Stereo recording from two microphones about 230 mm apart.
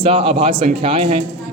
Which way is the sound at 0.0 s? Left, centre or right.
Right.